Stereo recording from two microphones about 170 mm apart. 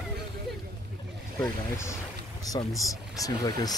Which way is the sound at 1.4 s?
15° left (ahead or behind).